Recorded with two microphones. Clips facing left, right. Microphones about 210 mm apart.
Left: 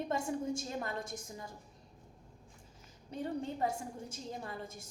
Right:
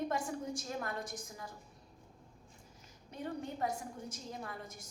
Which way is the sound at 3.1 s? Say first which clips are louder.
Left 3 dB; 30° left (ahead or behind).